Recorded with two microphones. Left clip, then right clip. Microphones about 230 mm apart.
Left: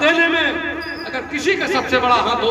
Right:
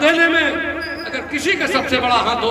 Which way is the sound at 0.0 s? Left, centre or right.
Right.